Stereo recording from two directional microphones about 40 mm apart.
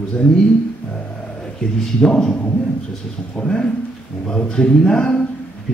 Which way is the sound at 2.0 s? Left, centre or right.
Centre.